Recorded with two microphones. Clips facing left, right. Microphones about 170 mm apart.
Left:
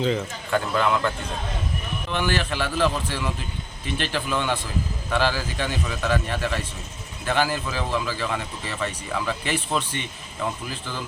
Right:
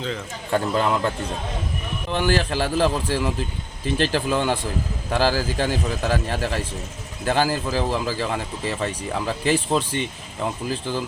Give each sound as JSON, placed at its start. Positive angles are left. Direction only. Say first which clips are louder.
{"t": 0.5, "sound": "speech", "louder": "right 1 dB", "side_deg": -35}